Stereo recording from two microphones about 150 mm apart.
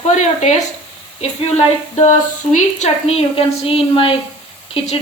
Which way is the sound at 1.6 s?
55° left (ahead or behind).